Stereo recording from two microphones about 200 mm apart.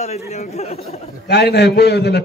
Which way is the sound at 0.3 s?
30° left (ahead or behind).